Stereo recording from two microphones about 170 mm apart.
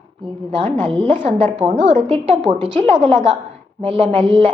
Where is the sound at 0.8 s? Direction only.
30° right (ahead or behind).